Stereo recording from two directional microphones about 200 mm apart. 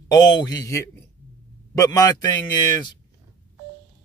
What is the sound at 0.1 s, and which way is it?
A man's voice, 20° left (ahead or behind).